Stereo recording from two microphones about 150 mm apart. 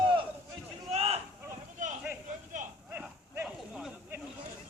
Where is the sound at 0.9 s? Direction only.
45° right (ahead or behind).